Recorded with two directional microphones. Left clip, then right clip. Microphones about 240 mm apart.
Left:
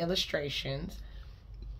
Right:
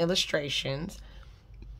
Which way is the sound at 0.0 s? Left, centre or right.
Right.